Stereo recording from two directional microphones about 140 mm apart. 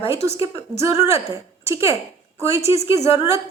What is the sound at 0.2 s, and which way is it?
Speech, 45° left (ahead or behind).